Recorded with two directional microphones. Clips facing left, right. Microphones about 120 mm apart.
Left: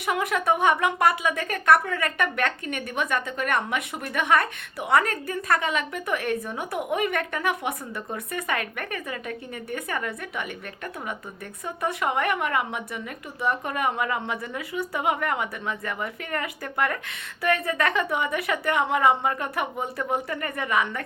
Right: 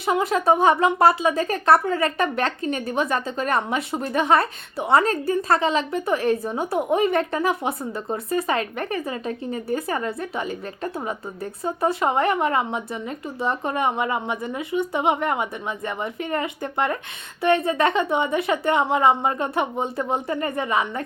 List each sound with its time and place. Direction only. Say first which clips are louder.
0.0 s speech: right 4 dB; 30° right (ahead or behind)
11.6 s speech: right 5 dB; 30° right (ahead or behind)